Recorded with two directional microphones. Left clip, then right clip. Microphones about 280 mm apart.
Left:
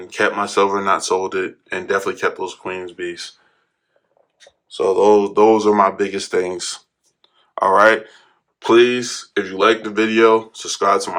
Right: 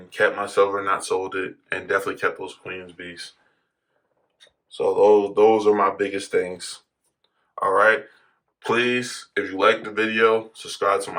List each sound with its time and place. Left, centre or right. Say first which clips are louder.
0.4 s speech: left 4 dB; centre
4.7 s speech: left 3 dB; left
8.5 s speech: left 8 dB; centre